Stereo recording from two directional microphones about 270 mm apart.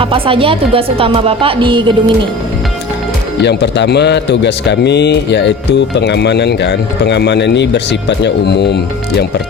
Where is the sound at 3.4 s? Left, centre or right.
Left.